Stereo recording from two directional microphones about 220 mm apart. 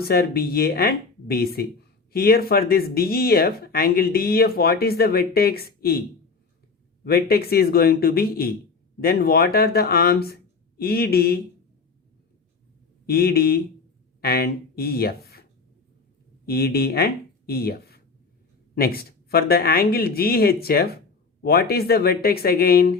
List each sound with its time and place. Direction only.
0.0 s speech: 45° left (ahead or behind)
7.0 s speech: 45° left (ahead or behind)
13.1 s speech: 45° left (ahead or behind)
16.5 s speech: 45° left (ahead or behind)